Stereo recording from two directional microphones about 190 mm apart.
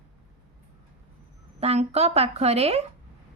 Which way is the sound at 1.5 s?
35° right (ahead or behind).